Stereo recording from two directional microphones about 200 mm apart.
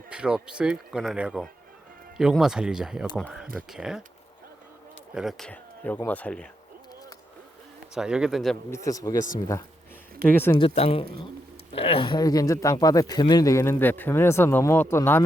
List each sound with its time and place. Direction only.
0.1 s speech: 5° right (ahead or behind)
5.1 s speech: centre (ahead or behind)
7.9 s speech: 5° right (ahead or behind)
8.7 s speech: 15° left (ahead or behind)
10.6 s speech: 30° left (ahead or behind); by 15.2 s 10° left (ahead or behind)